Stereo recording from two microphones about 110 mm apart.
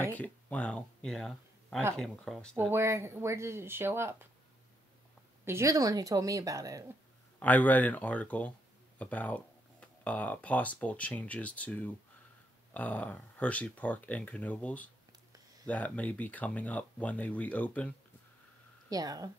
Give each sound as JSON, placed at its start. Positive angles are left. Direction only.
{"t": 0.0, "sound": "speech", "side_deg": 15}
{"t": 2.5, "sound": "speech", "side_deg": -20}
{"t": 5.4, "sound": "speech", "side_deg": -25}
{"t": 7.3, "sound": "speech", "side_deg": 15}
{"t": 18.9, "sound": "speech", "side_deg": -35}